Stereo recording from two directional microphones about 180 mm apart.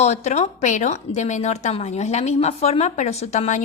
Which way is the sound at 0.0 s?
40° left (ahead or behind).